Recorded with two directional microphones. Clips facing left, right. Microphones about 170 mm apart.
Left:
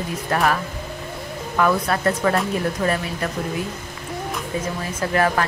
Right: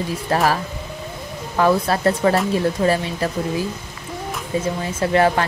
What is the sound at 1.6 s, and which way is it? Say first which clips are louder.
Speech: right 3 dB; 30° right (ahead or behind).